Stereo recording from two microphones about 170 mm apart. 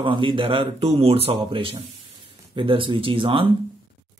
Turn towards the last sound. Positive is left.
turn(degrees=-30)  # may be behind; listen again after turning